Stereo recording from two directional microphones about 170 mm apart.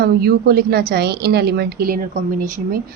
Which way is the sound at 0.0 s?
65° right (ahead or behind).